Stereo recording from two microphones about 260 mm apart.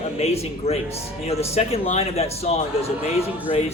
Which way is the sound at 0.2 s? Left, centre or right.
Left.